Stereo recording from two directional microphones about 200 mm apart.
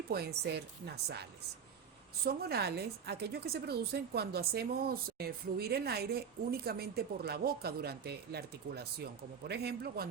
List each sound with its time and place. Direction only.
0.1 s a woman's voice: 55° right (ahead or behind)